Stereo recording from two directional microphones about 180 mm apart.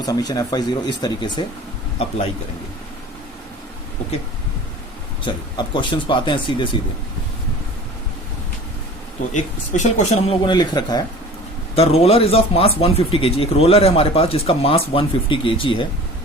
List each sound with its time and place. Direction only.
0.0 s speech: 20° left (ahead or behind)
5.2 s speech: 25° left (ahead or behind)
9.3 s speech: 40° left (ahead or behind)
10.4 s speech: 25° left (ahead or behind)
11.7 s speech: 35° left (ahead or behind)